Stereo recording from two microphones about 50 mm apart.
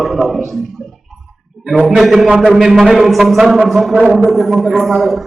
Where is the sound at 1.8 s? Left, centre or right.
Centre.